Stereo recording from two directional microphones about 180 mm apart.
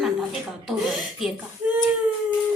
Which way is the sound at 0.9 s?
Centre (ahead or behind).